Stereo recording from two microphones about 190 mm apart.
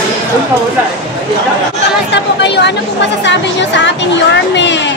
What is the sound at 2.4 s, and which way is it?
Speech, 65° left (ahead or behind).